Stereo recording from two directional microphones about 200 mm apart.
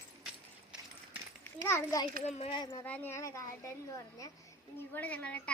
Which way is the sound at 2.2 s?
30° left (ahead or behind).